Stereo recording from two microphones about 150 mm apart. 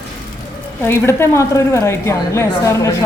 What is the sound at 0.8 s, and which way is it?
A woman's voice, 15° left (ahead or behind).